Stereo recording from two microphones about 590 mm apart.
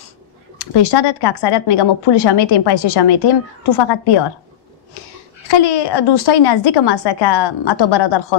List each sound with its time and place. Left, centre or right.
0.6 s speech: left
5.5 s speech: left